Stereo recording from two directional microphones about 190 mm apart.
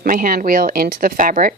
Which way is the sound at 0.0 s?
45° right (ahead or behind).